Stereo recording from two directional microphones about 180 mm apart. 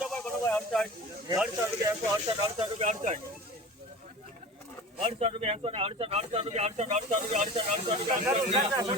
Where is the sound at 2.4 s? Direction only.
35° right (ahead or behind).